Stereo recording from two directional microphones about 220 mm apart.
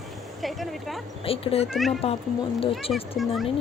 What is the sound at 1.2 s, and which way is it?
Speech, 25° left (ahead or behind).